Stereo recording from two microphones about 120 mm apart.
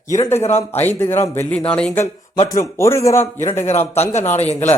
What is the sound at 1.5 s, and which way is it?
Speech, 10° left (ahead or behind).